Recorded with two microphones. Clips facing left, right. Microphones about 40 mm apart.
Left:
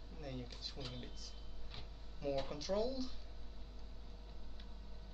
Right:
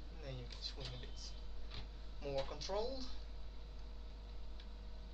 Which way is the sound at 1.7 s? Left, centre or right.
Centre.